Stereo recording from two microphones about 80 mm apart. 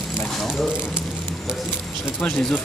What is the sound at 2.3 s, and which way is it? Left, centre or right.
Speech, centre.